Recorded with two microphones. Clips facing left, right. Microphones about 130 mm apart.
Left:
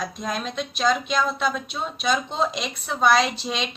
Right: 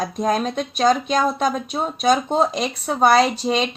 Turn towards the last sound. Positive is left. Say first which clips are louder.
# right 7 dB
turn(degrees=-40)  # may be behind; listen again after turning